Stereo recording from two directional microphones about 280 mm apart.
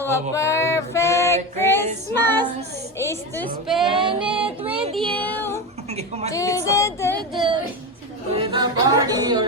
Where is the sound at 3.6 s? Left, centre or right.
Centre.